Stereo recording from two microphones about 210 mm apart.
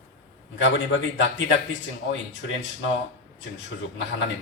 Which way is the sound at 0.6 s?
60° left (ahead or behind).